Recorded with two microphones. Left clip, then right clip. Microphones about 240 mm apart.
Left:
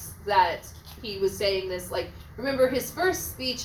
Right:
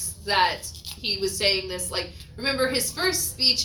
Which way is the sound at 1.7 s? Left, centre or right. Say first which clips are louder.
Even; right.